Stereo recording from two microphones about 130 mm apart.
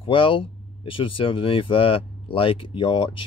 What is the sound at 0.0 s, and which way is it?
Speech, 45° left (ahead or behind).